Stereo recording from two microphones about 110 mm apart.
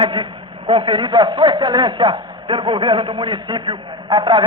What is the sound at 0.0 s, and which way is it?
A man's voice, 50° right (ahead or behind).